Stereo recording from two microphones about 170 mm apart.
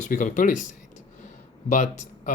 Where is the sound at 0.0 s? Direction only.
50° left (ahead or behind).